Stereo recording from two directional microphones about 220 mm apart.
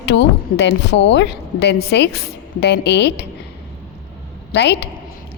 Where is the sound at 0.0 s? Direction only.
50° left (ahead or behind).